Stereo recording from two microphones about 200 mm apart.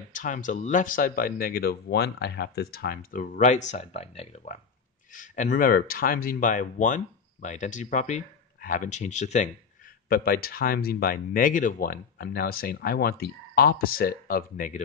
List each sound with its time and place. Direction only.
0.1 s speech: 40° left (ahead or behind)
10.0 s speech: 45° left (ahead or behind)